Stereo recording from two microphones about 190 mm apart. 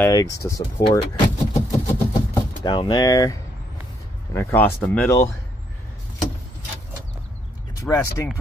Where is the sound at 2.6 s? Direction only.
25° left (ahead or behind).